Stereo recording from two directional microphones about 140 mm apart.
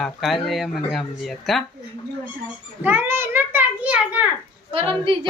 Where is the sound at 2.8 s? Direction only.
15° right (ahead or behind).